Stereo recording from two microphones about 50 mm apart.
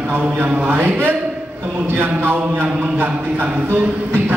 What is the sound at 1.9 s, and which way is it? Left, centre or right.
Speech, right.